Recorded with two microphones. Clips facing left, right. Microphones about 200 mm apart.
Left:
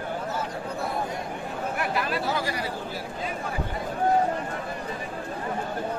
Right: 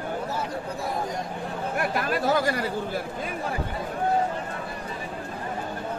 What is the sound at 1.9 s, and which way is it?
Speech, 45° right (ahead or behind).